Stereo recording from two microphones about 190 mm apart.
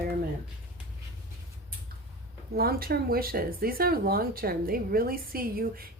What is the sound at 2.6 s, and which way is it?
Speech, 50° right (ahead or behind).